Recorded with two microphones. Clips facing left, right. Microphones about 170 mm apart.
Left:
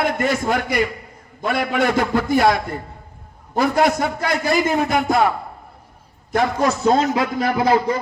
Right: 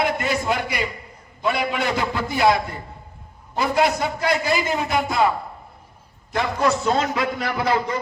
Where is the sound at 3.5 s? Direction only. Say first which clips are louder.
Left 3 dB; 50° left (ahead or behind).